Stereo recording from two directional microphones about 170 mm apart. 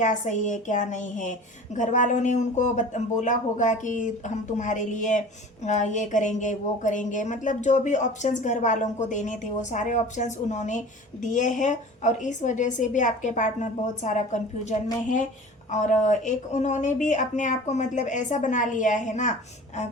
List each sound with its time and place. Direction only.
0.0 s a woman's voice: 45° left (ahead or behind)
15.7 s a woman's voice: 45° left (ahead or behind)